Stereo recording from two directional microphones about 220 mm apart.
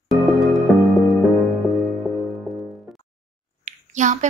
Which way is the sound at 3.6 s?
35° right (ahead or behind).